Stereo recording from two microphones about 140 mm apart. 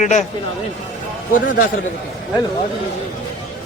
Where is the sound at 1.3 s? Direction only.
85° left.